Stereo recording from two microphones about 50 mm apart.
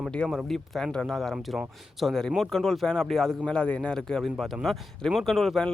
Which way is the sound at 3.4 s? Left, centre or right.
Left.